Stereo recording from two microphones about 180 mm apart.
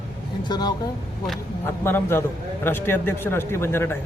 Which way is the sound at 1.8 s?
15° left (ahead or behind).